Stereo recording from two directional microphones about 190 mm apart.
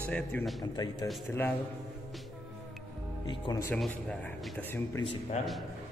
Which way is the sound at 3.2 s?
25° left (ahead or behind).